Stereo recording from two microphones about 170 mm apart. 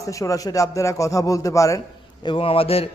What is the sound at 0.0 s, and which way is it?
Speech, 20° left (ahead or behind).